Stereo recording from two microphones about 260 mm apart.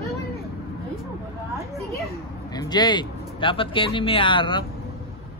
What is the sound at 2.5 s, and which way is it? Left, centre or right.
Speech, centre.